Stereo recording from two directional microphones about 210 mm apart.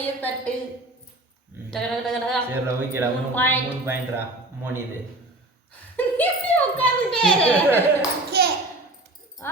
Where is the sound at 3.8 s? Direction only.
10° right (ahead or behind).